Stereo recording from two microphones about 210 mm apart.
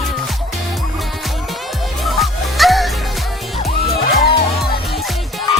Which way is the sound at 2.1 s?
Centre (ahead or behind).